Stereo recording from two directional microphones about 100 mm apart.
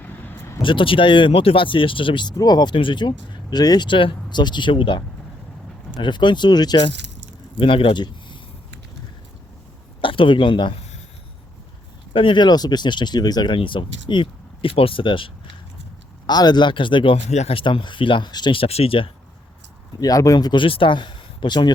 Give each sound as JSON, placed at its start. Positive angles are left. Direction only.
{"t": 0.0, "sound": "vehicle", "side_deg": 15}
{"t": 0.6, "sound": "speech", "side_deg": 55}
{"t": 2.3, "sound": "speech", "side_deg": 40}
{"t": 7.6, "sound": "speech", "side_deg": 60}
{"t": 10.0, "sound": "speech", "side_deg": 60}
{"t": 12.1, "sound": "speech", "side_deg": 60}
{"t": 13.6, "sound": "speech", "side_deg": 55}
{"t": 16.2, "sound": "speech", "side_deg": 45}
{"t": 18.6, "sound": "speech", "side_deg": 75}
{"t": 20.0, "sound": "speech", "side_deg": 35}
{"t": 20.7, "sound": "speech", "side_deg": 60}